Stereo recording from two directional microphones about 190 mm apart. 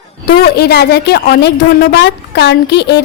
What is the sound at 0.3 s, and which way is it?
A woman's voice, 55° left (ahead or behind).